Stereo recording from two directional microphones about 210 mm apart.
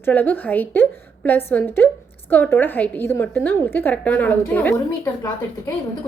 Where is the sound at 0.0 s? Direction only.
10° left (ahead or behind).